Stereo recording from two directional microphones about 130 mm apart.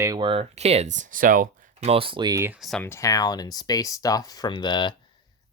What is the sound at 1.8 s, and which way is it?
Speech, 45° right (ahead or behind).